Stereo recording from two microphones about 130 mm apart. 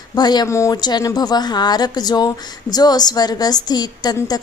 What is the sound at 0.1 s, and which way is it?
A woman's voice, 30° left (ahead or behind).